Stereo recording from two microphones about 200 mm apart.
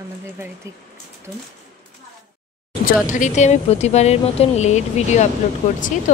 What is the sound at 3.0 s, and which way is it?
Speech, 40° left (ahead or behind).